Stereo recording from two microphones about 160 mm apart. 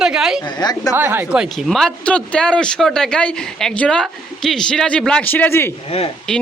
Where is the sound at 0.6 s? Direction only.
25° left (ahead or behind).